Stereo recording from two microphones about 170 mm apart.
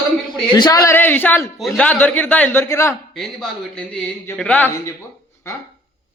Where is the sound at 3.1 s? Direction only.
Centre (ahead or behind).